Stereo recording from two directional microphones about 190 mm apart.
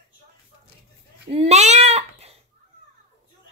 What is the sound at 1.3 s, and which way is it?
Speech, 35° right (ahead or behind).